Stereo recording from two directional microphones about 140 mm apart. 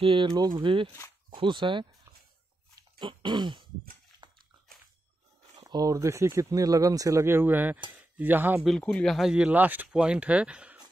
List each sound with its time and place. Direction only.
0.0 s speech: 40° right (ahead or behind)
3.0 s throat clearing: 35° right (ahead or behind)
5.6 s speech: 30° right (ahead or behind)
8.6 s speech: 5° left (ahead or behind)